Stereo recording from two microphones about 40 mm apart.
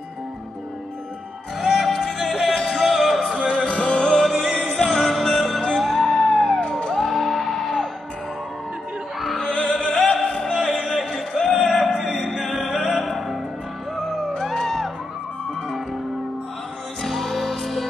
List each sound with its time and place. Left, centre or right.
1.6 s music: centre
2.5 s music: centre
2.8 s music: centre
3.5 s music: centre
4.2 s music: centre
9.4 s opera: centre
9.7 s music: centre
17.0 s music: centre